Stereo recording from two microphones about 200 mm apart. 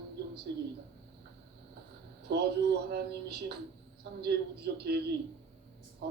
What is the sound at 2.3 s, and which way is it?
A man's voice, 55° right (ahead or behind).